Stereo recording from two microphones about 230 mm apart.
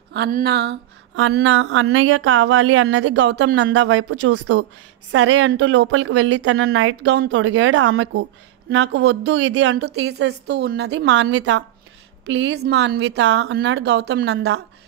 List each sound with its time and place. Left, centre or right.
0.1 s speech: right